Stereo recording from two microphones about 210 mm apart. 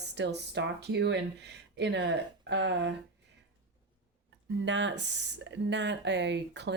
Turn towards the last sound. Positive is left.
turn(degrees=-55)  # may be behind; listen again after turning